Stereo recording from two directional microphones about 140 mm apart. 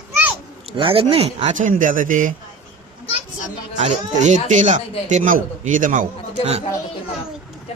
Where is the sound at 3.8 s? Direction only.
55° right (ahead or behind).